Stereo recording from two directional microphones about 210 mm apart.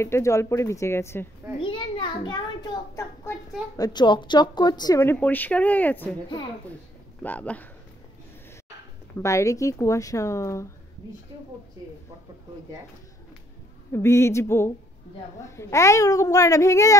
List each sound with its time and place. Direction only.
0.0 s speech: 15° left (ahead or behind)
1.6 s a sound: 20° left (ahead or behind)
3.7 s speech: 20° left (ahead or behind)
7.2 s speech: 5° left (ahead or behind)
9.2 s speech: 15° left (ahead or behind)
13.9 s speech: 10° left (ahead or behind)